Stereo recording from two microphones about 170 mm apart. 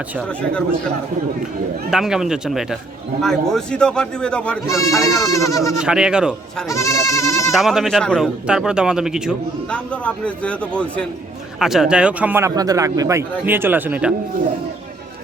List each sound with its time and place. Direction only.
0.2 s a man's voice: 5° left (ahead or behind)
1.9 s speech: 5° right (ahead or behind)
4.6 s a man's voice: 20° left (ahead or behind)
4.9 s speech: centre (ahead or behind)
5.2 s speech: 20° left (ahead or behind)
5.7 s speech: 5° right (ahead or behind)
6.7 s goat: 20° left (ahead or behind)
7.5 s speech: centre (ahead or behind)
9.7 s a man's voice: 5° left (ahead or behind); by 14.1 s 10° right (ahead or behind)